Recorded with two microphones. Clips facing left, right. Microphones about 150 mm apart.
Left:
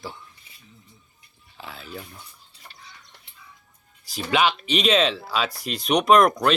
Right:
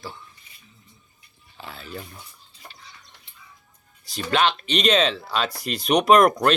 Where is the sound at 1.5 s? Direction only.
Centre (ahead or behind).